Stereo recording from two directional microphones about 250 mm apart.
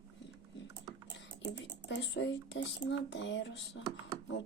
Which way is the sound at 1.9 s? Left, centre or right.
Left.